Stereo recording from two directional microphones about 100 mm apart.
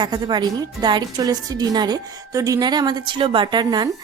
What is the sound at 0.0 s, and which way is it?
Speech, 45° right (ahead or behind).